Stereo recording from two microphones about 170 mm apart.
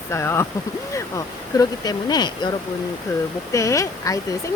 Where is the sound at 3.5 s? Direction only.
20° left (ahead or behind).